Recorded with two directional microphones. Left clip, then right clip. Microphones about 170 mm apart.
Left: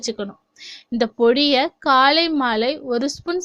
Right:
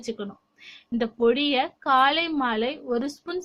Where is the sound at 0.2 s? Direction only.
40° left (ahead or behind).